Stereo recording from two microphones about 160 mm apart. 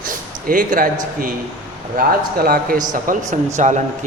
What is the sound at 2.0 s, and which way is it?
Speech, 60° right (ahead or behind).